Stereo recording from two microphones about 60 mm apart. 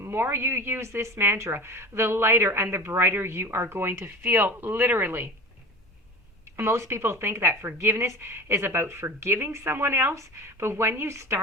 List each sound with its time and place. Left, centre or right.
0.0 s a woman's voice: right
6.6 s a woman's voice: right